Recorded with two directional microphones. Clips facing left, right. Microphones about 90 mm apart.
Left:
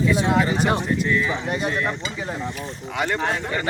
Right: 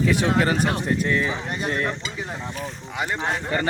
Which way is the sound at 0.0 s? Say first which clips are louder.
Left 1 dB; 65° right (ahead or behind).